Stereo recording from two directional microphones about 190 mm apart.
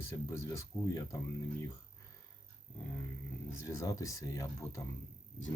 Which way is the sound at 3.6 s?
15° left (ahead or behind).